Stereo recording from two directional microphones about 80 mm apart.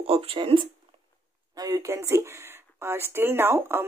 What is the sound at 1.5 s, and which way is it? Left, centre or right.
Speech, right.